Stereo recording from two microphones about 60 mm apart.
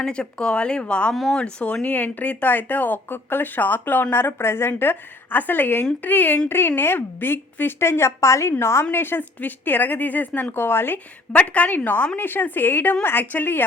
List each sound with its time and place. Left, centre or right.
0.0 s speech: centre
1.1 s speech: centre
1.4 s speech: centre; by 11.0 s left
11.3 s speech: left